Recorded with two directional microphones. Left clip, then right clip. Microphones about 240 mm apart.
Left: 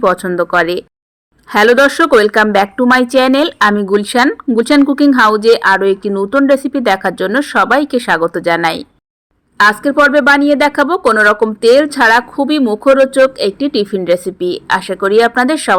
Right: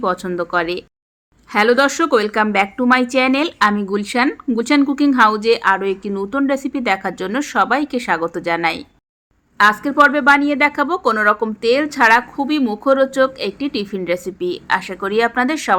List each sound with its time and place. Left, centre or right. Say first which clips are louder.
0.0 s a woman's voice: left 8 dB; centre